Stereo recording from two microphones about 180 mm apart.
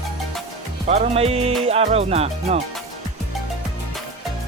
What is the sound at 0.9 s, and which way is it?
Speech, 35° right (ahead or behind).